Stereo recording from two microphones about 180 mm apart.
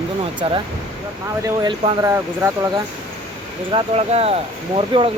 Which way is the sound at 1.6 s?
25° right (ahead or behind).